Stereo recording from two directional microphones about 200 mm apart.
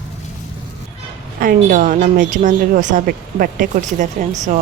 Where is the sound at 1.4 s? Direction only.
45° right (ahead or behind).